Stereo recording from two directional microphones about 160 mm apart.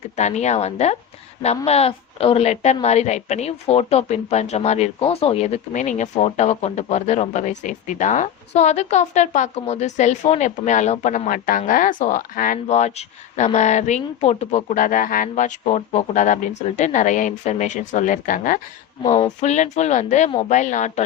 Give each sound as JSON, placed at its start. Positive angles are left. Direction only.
{"t": 0.2, "sound": "a woman's voice", "side_deg": 45}
{"t": 19.0, "sound": "a woman's voice", "side_deg": 40}